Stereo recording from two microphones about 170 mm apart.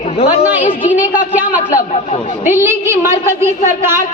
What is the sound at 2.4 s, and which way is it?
A woman's voice, 15° right (ahead or behind).